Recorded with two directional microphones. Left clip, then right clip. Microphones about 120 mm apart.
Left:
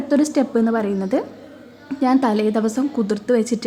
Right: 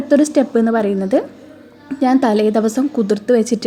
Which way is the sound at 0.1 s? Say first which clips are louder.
Right 5 dB; 20° right (ahead or behind).